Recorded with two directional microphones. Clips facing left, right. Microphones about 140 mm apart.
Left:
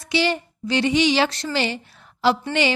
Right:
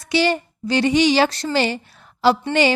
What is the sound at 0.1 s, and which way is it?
A woman's voice, 45° right (ahead or behind).